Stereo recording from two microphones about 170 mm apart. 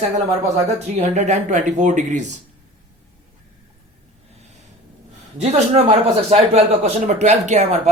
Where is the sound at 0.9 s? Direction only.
40° right (ahead or behind).